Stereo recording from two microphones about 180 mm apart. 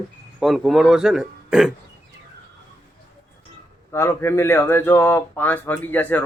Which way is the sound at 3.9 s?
15° left (ahead or behind).